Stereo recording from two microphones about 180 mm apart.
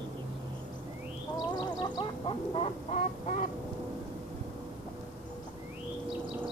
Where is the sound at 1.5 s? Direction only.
25° left (ahead or behind).